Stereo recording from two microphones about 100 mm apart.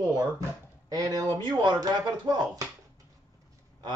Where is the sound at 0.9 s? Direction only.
40° right (ahead or behind).